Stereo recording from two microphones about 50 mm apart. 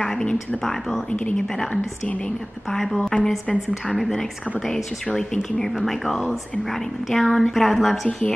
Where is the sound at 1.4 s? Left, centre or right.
Centre.